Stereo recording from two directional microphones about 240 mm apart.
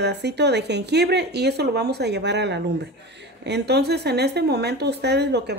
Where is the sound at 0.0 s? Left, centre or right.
Right.